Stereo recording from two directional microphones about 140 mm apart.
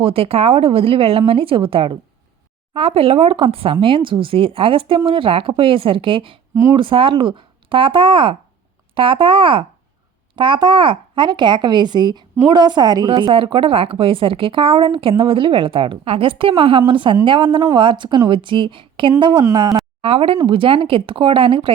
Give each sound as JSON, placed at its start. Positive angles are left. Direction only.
{"t": 0.0, "sound": "a child's voice", "side_deg": -45}
{"t": 6.5, "sound": "speech", "side_deg": -20}
{"t": 6.7, "sound": "a child's voice", "side_deg": -40}
{"t": 20.0, "sound": "a child's voice", "side_deg": -40}